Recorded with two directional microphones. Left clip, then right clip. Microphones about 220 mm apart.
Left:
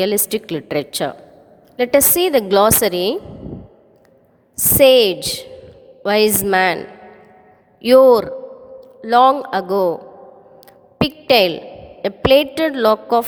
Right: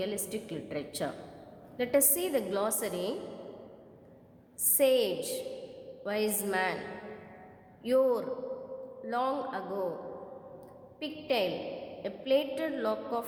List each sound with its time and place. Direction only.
0.0 s a woman's voice: 45° left (ahead or behind)
4.5 s a woman's voice: 40° left (ahead or behind)
7.8 s a woman's voice: 40° left (ahead or behind)
11.0 s a woman's voice: 45° left (ahead or behind)